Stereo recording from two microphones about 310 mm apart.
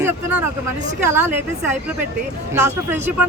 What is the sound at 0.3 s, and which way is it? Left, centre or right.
Speech, right.